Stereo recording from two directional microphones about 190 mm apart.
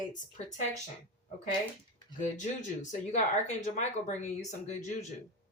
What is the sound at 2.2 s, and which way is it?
Speech, 40° left (ahead or behind).